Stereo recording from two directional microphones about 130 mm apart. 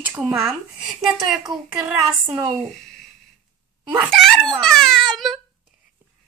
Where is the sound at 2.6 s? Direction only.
5° left (ahead or behind).